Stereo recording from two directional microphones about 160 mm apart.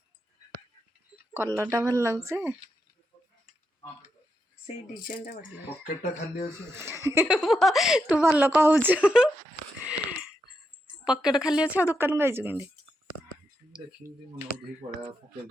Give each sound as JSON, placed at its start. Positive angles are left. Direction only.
{"t": 1.3, "sound": "speech", "side_deg": -15}
{"t": 5.0, "sound": "speech", "side_deg": 60}
{"t": 5.8, "sound": "speech", "side_deg": 75}
{"t": 6.7, "sound": "speech", "side_deg": -15}
{"t": 7.4, "sound": "speech", "side_deg": 0}
{"t": 9.8, "sound": "a sound", "side_deg": -5}
{"t": 11.0, "sound": "speech", "side_deg": -5}
{"t": 13.7, "sound": "speech", "side_deg": -5}
{"t": 14.8, "sound": "speech", "side_deg": -35}